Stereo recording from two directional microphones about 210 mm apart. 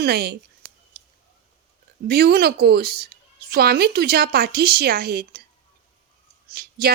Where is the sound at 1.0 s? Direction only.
45° right (ahead or behind).